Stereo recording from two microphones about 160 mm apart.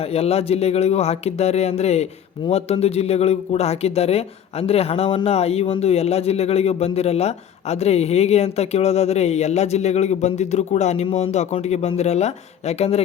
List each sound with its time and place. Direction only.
0.0 s a man's voice: 40° left (ahead or behind)